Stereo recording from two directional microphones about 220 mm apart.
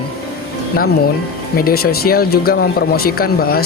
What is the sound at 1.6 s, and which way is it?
Speech, 40° left (ahead or behind).